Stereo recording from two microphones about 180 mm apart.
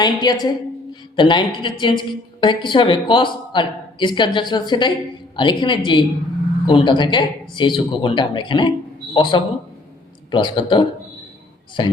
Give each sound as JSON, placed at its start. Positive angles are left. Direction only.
{"t": 0.0, "sound": "a woman's voice", "side_deg": 20}